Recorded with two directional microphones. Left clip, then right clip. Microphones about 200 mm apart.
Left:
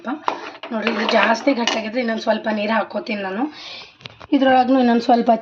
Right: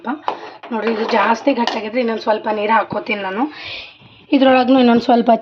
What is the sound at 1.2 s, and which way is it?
Speech, centre (ahead or behind).